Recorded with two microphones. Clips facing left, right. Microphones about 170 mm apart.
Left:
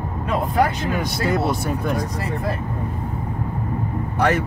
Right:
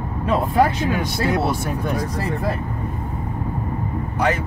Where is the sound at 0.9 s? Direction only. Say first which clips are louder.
Right 1 dB; centre (ahead or behind).